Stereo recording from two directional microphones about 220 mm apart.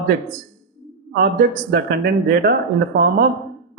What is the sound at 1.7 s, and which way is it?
Speech, 45° right (ahead or behind).